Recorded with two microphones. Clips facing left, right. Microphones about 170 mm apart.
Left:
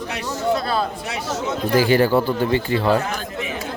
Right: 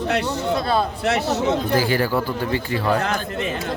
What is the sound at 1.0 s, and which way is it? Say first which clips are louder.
Speech: right 6 dB; 65° right (ahead or behind).